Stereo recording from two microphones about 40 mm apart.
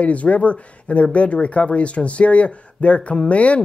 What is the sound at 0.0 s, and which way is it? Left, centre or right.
Speech, left.